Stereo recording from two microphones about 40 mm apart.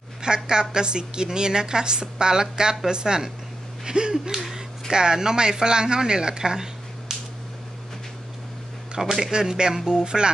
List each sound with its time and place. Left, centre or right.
0.2 s a woman's voice: centre
9.2 s a woman's voice: centre